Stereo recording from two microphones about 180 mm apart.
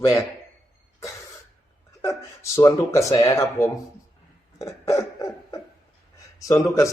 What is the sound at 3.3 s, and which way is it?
Speech, 15° left (ahead or behind).